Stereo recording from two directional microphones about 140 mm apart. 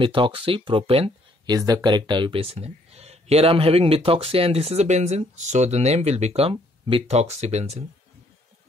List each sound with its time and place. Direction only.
0.0 s speech: 40° right (ahead or behind)
1.5 s speech: 25° right (ahead or behind); by 7.8 s 50° right (ahead or behind)